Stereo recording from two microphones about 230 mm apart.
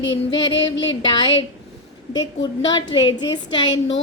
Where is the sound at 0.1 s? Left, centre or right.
Centre.